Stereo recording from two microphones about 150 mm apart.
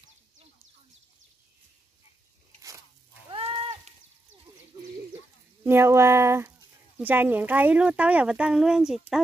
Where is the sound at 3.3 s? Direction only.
35° right (ahead or behind).